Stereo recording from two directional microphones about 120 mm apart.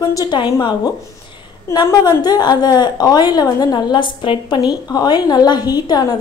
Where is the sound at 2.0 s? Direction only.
30° left (ahead or behind).